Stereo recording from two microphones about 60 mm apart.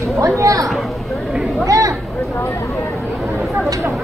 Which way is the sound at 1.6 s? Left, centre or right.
Right.